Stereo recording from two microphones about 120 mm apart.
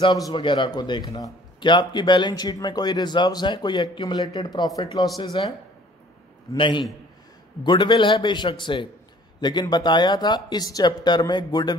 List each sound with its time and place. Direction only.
0.0 s a man's voice: 35° left (ahead or behind)
6.5 s a man's voice: 40° left (ahead or behind)